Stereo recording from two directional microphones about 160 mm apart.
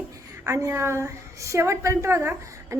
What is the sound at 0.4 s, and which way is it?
A woman's voice, 20° right (ahead or behind).